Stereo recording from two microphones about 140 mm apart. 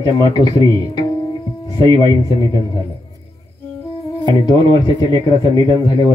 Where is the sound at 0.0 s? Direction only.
30° left (ahead or behind).